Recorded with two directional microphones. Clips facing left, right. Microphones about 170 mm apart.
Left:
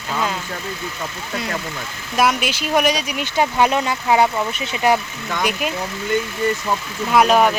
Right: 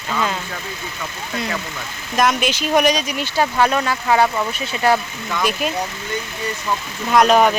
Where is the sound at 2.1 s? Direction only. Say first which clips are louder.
Right 1 dB; 5° left (ahead or behind).